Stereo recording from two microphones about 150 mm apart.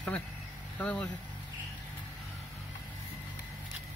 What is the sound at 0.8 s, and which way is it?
Speech, 10° left (ahead or behind).